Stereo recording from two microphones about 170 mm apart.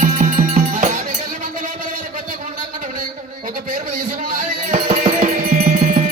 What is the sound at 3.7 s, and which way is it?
Music, 50° right (ahead or behind).